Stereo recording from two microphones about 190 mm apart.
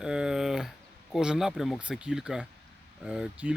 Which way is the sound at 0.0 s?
5° right (ahead or behind).